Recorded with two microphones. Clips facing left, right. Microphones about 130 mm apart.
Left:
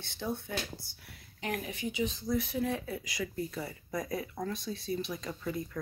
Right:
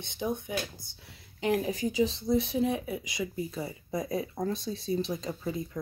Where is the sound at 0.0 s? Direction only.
20° right (ahead or behind).